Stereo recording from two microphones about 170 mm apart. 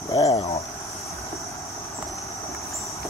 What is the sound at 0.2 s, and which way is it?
Cricket, 35° left (ahead or behind).